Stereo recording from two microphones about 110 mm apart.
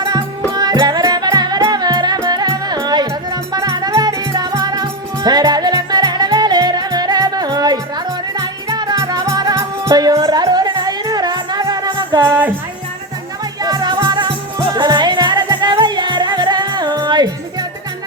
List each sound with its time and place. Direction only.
0.0 s music: 35° right (ahead or behind)
13.6 s music: 35° right (ahead or behind)